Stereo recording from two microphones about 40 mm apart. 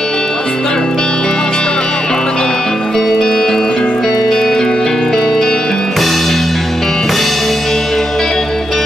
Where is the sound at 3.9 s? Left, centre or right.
Centre.